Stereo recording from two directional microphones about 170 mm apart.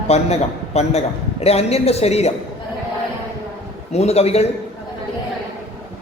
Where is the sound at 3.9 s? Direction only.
40° left (ahead or behind).